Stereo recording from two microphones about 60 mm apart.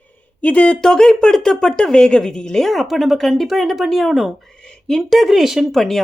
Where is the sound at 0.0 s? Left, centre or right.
Left.